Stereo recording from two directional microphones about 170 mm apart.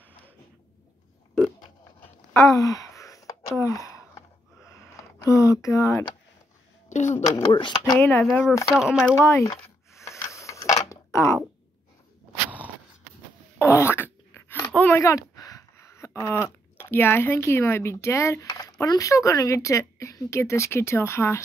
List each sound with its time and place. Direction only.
2.5 s a sound: 20° left (ahead or behind)
6.9 s speech: 45° left (ahead or behind)
7.5 s speech: 25° left (ahead or behind)
8.0 s speech: 5° left (ahead or behind)
9.1 s speech: 15° left (ahead or behind)
10.0 s mechanisms: 15° left (ahead or behind)
12.4 s a sound: 10° right (ahead or behind)
13.6 s a sound: 15° left (ahead or behind)
14.8 s speech: 15° left (ahead or behind)